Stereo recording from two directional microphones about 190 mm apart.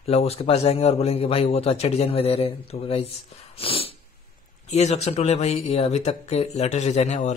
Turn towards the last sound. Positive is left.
turn(degrees=40)  # may be behind; listen again after turning